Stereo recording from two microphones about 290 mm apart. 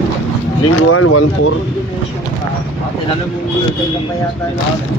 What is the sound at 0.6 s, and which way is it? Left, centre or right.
Speech, left.